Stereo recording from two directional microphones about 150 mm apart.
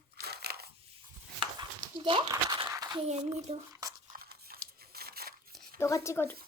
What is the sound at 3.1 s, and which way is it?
Speech, 45° right (ahead or behind).